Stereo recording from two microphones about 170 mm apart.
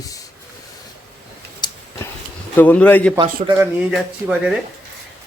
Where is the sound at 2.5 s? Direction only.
10° left (ahead or behind).